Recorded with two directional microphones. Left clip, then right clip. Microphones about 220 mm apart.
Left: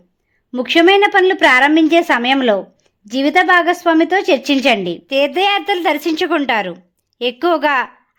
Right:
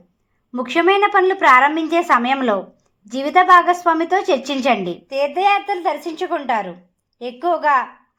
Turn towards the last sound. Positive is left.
turn(degrees=40)  # may be behind; listen again after turning